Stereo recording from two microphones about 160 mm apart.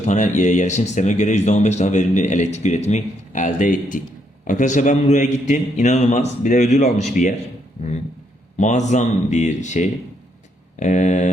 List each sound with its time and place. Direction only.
0.0 s speech: 50° left (ahead or behind)
8.5 s speech: 45° left (ahead or behind)